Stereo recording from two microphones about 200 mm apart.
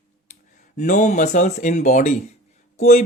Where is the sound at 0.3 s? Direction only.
35° left (ahead or behind).